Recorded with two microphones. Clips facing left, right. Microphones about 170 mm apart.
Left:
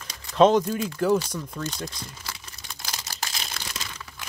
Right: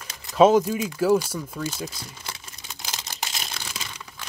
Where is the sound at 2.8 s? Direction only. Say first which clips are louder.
Right 1 dB; 20° right (ahead or behind).